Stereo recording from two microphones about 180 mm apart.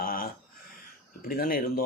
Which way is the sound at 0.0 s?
55° left (ahead or behind).